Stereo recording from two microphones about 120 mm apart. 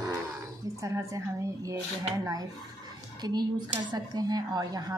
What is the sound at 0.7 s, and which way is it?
A woman's voice, 25° right (ahead or behind).